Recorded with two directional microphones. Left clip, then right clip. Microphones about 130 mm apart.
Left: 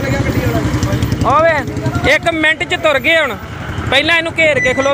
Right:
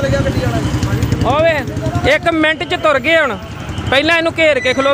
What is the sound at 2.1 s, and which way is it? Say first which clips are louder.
Speech: left 1 dB; 30° right (ahead or behind).